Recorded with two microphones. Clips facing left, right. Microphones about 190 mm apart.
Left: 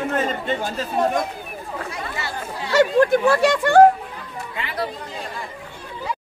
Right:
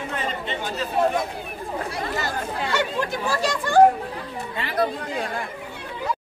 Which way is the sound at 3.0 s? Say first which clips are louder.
Left 8 dB; 60° left (ahead or behind).